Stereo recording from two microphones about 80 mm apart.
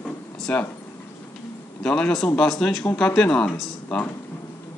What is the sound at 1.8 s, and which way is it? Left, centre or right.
Speech, centre.